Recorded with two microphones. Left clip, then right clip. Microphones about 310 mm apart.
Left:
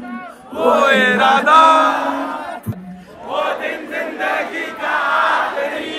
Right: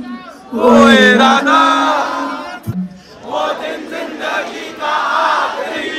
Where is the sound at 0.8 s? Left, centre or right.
Centre.